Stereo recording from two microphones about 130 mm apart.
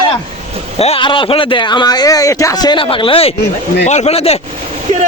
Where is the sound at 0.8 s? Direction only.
45° left (ahead or behind).